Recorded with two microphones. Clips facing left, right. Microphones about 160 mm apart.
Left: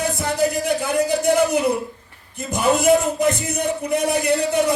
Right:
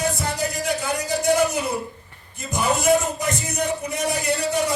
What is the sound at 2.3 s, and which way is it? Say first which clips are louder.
Speech: left 4 dB; 55° left (ahead or behind).